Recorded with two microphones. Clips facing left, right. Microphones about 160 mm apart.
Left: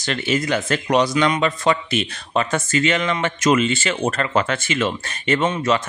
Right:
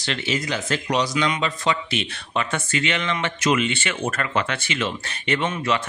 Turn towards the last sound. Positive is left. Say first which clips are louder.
# left 4 dB
turn(degrees=40)  # may be behind; listen again after turning